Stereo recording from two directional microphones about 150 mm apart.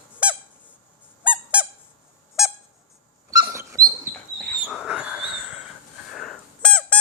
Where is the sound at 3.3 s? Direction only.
20° right (ahead or behind).